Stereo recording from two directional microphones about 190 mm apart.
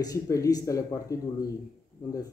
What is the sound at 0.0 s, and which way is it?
A man's voice, 20° left (ahead or behind).